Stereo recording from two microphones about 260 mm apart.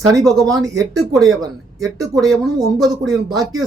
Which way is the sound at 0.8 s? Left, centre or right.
Centre.